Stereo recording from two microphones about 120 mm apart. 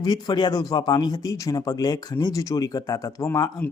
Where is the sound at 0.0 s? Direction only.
35° left (ahead or behind).